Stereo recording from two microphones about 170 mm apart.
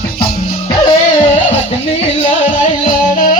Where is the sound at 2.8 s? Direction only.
50° left (ahead or behind).